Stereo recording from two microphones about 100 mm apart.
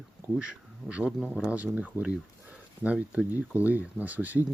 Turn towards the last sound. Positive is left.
turn(degrees=-15)  # may be behind; listen again after turning